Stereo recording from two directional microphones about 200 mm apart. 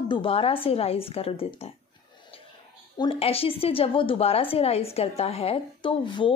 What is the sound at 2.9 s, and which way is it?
A woman's voice, 25° left (ahead or behind).